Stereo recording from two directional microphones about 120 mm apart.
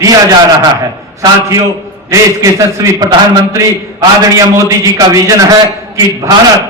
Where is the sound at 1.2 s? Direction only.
30° right (ahead or behind).